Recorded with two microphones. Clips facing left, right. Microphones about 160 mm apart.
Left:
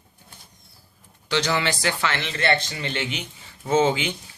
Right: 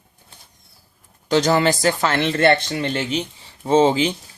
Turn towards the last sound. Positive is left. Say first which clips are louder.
# right 5 dB
turn(degrees=-35)  # may be behind; listen again after turning